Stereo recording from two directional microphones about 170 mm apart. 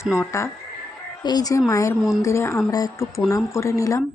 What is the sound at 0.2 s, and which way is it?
Speech, 15° left (ahead or behind).